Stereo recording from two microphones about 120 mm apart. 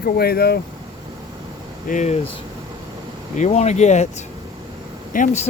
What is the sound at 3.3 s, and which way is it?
Speech, 80° left.